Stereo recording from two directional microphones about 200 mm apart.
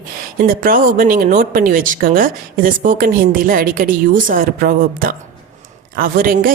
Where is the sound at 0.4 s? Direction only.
45° right (ahead or behind).